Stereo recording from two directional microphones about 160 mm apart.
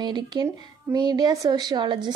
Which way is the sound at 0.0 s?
25° right (ahead or behind).